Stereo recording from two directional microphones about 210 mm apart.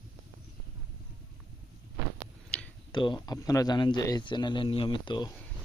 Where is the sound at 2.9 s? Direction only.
20° left (ahead or behind).